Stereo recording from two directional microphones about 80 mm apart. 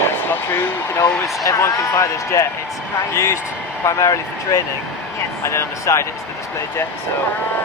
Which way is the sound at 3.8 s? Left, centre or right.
Left.